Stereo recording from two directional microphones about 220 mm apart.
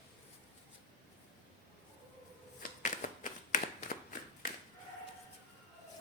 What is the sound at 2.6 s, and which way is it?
Shuffling cards, 35° left (ahead or behind).